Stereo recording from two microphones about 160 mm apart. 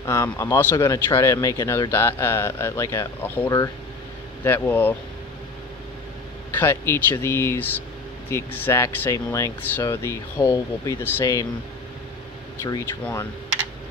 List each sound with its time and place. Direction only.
0.0 s speech: 20° left (ahead or behind)
6.5 s speech: 15° left (ahead or behind)
12.6 s speech: 20° left (ahead or behind)